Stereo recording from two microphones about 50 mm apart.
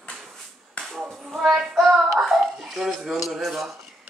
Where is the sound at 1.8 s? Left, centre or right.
Centre.